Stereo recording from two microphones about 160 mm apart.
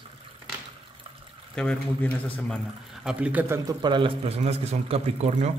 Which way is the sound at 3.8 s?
30° right (ahead or behind).